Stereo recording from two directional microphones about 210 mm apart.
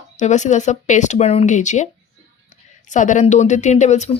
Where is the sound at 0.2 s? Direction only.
35° left (ahead or behind).